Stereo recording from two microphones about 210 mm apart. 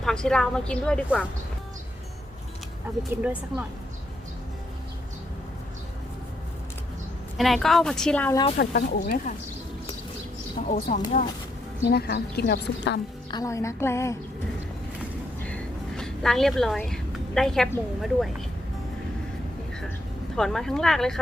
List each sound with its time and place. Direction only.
0.0 s a woman's voice: 5° left (ahead or behind)
3.0 s speech: 10° right (ahead or behind)
7.3 s a woman's voice: centre (ahead or behind)
8.5 s speech: 40° left (ahead or behind)
10.7 s speech: 35° left (ahead or behind)
11.8 s a woman's voice: 50° left (ahead or behind)
13.3 s a woman's voice: 15° left (ahead or behind)
15.4 s a sound: 5° left (ahead or behind)
20.3 s a woman's voice: centre (ahead or behind)